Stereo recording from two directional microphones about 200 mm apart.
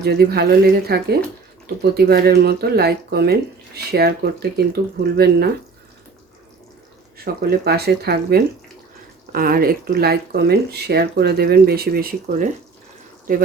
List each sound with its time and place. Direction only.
0.0 s speech: 55° right (ahead or behind)
7.4 s speech: 55° right (ahead or behind)